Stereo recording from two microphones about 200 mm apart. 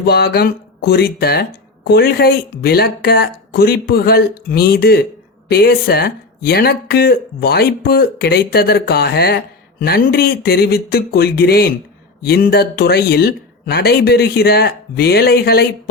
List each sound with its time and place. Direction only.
0.0 s speech: 50° left (ahead or behind)